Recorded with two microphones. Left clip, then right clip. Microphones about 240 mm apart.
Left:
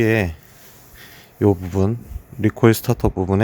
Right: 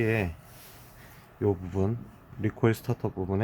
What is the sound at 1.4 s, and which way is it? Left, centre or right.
Speech, left.